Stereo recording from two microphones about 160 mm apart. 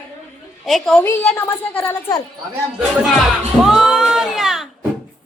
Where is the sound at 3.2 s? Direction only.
Centre (ahead or behind).